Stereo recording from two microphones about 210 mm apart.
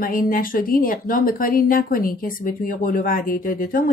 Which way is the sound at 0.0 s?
40° left (ahead or behind).